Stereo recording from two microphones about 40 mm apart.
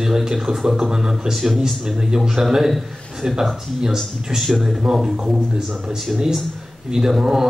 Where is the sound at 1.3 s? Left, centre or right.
Centre.